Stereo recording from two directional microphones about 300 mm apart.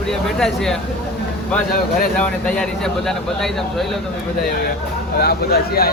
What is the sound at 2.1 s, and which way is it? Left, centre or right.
A man's voice, centre.